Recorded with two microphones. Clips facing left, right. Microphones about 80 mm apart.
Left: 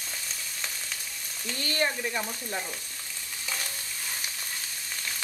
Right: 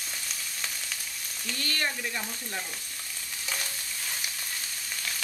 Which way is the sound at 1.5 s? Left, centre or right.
Left.